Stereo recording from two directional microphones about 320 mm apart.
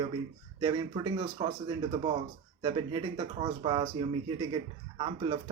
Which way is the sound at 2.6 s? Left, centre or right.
Centre.